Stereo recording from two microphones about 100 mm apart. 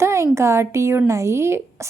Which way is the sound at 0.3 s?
30° right (ahead or behind).